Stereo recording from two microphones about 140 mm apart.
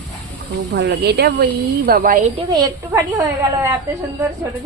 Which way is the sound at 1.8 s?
80° right.